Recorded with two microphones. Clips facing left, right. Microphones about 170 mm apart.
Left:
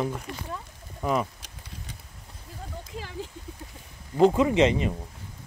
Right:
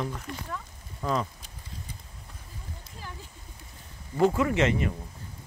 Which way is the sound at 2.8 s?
90° left.